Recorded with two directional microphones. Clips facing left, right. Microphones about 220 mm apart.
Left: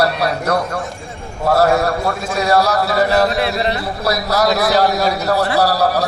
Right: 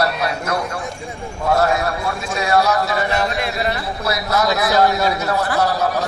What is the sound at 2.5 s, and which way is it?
A man's voice, 35° left (ahead or behind).